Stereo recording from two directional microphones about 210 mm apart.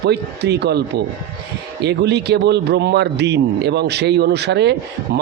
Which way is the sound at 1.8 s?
55° right (ahead or behind).